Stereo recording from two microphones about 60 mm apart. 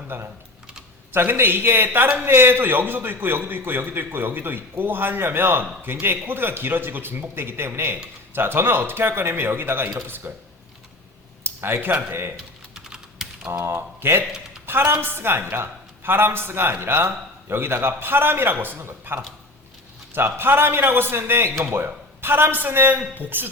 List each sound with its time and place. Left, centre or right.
0.1 s a man's voice: right
11.4 s a sound: right
11.9 s speech: right
12.7 s typing: centre
13.7 s a woman's voice: right